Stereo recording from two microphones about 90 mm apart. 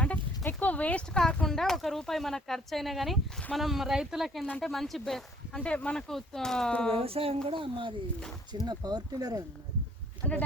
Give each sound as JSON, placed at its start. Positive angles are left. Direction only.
{"t": 0.0, "sound": "speech", "side_deg": 15}
{"t": 5.5, "sound": "speech", "side_deg": 15}
{"t": 6.9, "sound": "speech", "side_deg": -90}
{"t": 7.4, "sound": "speech", "side_deg": -70}
{"t": 8.6, "sound": "speech", "side_deg": -50}
{"t": 10.2, "sound": "speech", "side_deg": 20}